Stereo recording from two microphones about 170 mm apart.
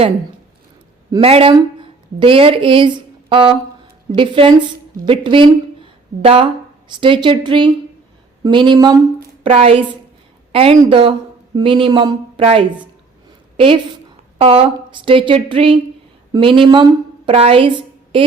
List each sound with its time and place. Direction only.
1.2 s a woman's voice: 35° right (ahead or behind)
14.3 s a woman's voice: 35° right (ahead or behind)